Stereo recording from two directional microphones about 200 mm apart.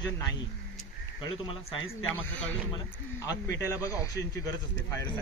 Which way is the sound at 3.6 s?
15° left (ahead or behind).